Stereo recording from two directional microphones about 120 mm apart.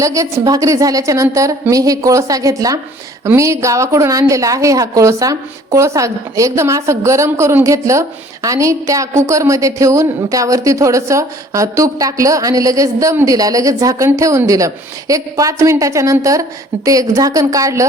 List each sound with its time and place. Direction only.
0.0 s a woman's voice: 25° right (ahead or behind)